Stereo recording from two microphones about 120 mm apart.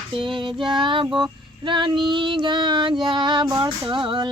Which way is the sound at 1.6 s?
40° right (ahead or behind).